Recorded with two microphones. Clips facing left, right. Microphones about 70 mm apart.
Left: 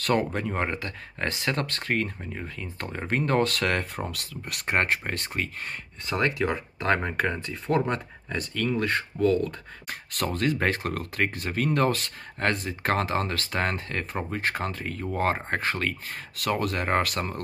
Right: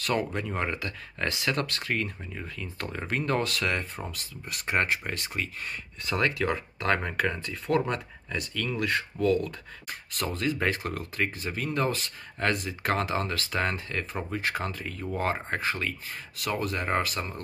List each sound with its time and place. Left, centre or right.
0.0 s speech: left
6.0 s speech: left
8.3 s speech: left
9.8 s speech: left